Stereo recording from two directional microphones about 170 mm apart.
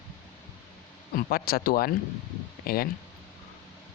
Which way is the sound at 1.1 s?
60° left (ahead or behind).